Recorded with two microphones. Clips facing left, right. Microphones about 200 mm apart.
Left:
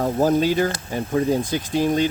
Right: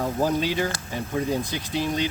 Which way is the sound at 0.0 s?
45° left (ahead or behind).